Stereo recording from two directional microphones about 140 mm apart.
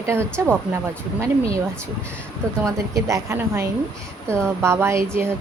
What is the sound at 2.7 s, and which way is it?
A woman's voice, 25° right (ahead or behind).